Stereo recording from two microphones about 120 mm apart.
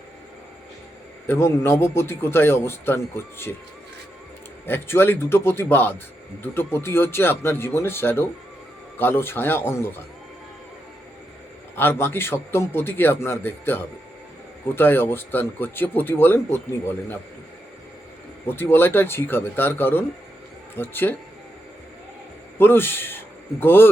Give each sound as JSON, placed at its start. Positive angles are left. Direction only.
{"t": 1.3, "sound": "a man's voice", "side_deg": 20}
{"t": 4.6, "sound": "a man's voice", "side_deg": 20}
{"t": 11.8, "sound": "a man's voice", "side_deg": 20}
{"t": 18.4, "sound": "speech", "side_deg": 20}
{"t": 22.5, "sound": "a man's voice", "side_deg": 20}